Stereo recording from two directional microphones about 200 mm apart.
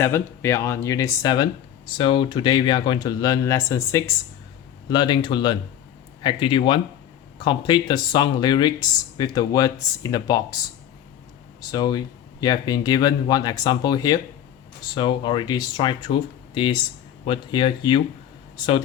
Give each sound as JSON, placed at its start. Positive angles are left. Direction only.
{"t": 0.0, "sound": "speech", "side_deg": 10}
{"t": 11.6, "sound": "speech", "side_deg": 20}